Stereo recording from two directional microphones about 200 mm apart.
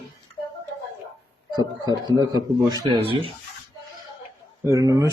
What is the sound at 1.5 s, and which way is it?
Speech, 20° right (ahead or behind).